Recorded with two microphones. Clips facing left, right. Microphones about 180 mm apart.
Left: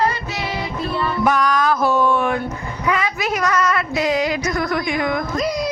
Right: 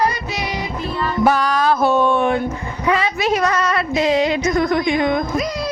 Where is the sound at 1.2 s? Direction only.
30° right (ahead or behind).